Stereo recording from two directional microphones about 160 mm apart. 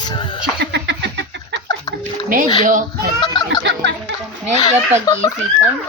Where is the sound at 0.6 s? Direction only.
90° right.